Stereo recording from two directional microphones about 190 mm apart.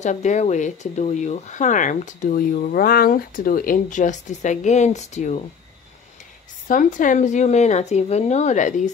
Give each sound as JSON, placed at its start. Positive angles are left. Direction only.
{"t": 0.0, "sound": "speech", "side_deg": 40}
{"t": 6.7, "sound": "speech", "side_deg": 45}